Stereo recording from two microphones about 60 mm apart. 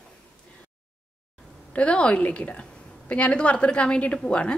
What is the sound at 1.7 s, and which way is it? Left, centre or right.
A woman's voice, centre.